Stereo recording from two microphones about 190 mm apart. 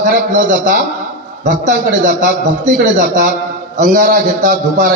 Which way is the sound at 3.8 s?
45° right (ahead or behind).